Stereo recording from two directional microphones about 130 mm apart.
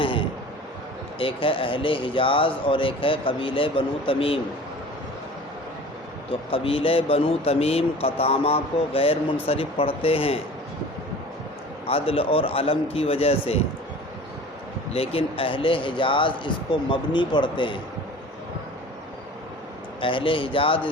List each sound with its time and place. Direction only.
0.0 s a sound: 40° left (ahead or behind)
1.2 s speech: 45° left (ahead or behind)
6.5 s speech: 45° left (ahead or behind)
11.9 s speech: 45° left (ahead or behind)
14.9 s speech: 50° left (ahead or behind)
20.0 s speech: 40° left (ahead or behind)